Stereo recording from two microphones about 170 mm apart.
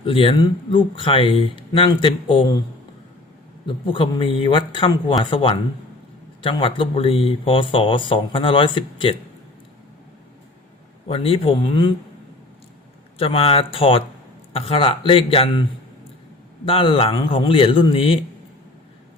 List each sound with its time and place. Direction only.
0.0 s speech: 30° left (ahead or behind)
3.7 s speech: 30° left (ahead or behind)
11.0 s speech: 35° left (ahead or behind)
13.1 s speech: 35° left (ahead or behind)
16.6 s speech: 30° left (ahead or behind)